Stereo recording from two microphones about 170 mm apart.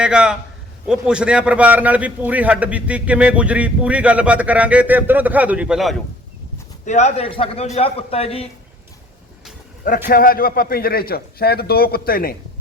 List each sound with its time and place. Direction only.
0.0 s a man's voice: 5° right (ahead or behind)
6.8 s a man's voice: 45° left (ahead or behind)
10.1 s a man's voice: 60° left (ahead or behind)